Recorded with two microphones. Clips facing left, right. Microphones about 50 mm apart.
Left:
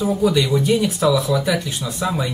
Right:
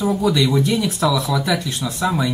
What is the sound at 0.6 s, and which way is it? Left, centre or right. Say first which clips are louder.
Speech: left 2 dB; centre.